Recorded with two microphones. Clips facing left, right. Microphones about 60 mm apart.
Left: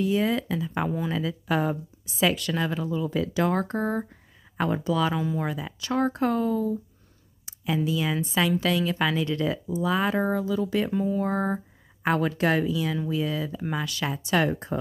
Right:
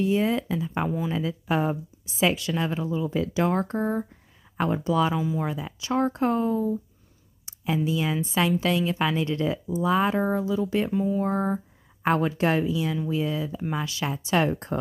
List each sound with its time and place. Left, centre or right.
0.0 s a woman's voice: right
0.5 s a woman's voice: centre
0.8 s speech: centre
1.1 s a woman's voice: right
3.5 s speech: left
4.8 s a woman's voice: right
5.1 s speech: centre
5.5 s a woman's voice: right
10.9 s speech: centre
11.2 s a sound: left
12.0 s a woman's voice: right
13.6 s a woman's voice: centre; by 14.8 s right